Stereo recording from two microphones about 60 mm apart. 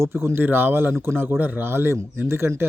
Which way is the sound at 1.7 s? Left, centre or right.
Right.